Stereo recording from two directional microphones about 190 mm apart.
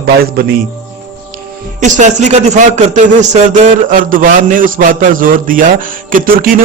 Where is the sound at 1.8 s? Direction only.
40° right (ahead or behind).